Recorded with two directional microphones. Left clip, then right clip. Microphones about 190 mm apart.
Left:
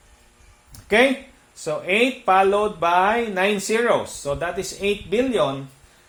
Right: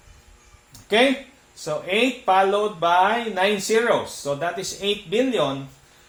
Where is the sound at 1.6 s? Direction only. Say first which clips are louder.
Left 2 dB; 50° left (ahead or behind).